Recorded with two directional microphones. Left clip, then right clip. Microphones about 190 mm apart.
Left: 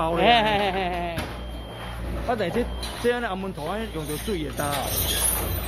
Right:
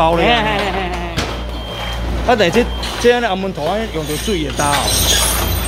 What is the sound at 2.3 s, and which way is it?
Speech, 15° right (ahead or behind).